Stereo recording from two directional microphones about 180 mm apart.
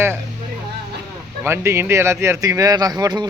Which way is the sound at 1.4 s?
15° right (ahead or behind).